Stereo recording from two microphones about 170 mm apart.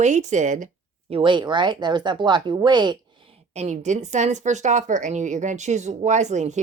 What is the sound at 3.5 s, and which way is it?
Speech, 40° right (ahead or behind).